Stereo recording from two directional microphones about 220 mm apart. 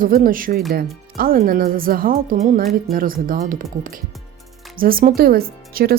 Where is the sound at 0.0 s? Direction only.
40° right (ahead or behind).